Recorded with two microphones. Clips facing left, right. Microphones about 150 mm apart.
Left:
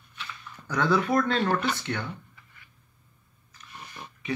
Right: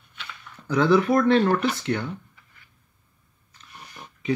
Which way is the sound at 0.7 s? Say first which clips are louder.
Right 5 dB; 15° right (ahead or behind).